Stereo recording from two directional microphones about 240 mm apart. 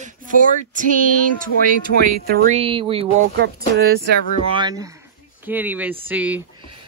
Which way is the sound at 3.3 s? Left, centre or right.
Right.